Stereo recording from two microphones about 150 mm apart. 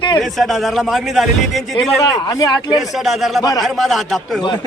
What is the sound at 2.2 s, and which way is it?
Speech, 25° left (ahead or behind).